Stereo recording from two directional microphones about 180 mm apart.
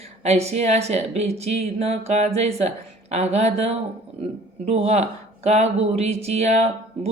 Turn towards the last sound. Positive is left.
turn(degrees=-35)  # may be behind; listen again after turning